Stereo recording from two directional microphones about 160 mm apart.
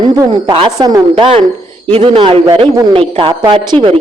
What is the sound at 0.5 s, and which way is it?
Speech, 25° right (ahead or behind).